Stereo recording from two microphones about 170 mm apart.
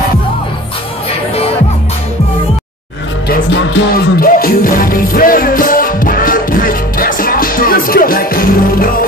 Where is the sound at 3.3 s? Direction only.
75° left (ahead or behind).